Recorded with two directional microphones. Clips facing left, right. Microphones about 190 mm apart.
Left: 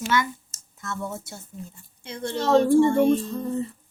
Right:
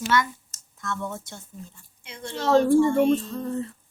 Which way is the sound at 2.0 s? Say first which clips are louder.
Left 7 dB; 35° left (ahead or behind).